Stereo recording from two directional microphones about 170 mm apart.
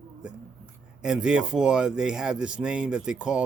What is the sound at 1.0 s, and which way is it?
Speech, 5° right (ahead or behind).